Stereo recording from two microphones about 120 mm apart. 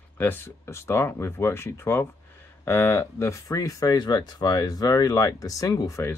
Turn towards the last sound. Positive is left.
turn(degrees=25)  # may be behind; listen again after turning